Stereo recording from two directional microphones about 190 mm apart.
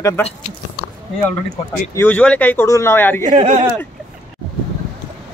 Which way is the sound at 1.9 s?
10° left (ahead or behind).